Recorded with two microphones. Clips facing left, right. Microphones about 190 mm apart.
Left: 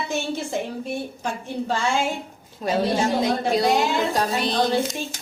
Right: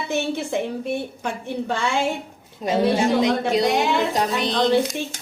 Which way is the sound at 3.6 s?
60° right (ahead or behind).